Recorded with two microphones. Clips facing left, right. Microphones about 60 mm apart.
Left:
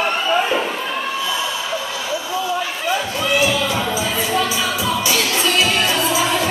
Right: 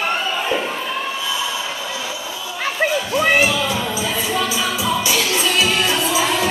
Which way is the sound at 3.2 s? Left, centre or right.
Right.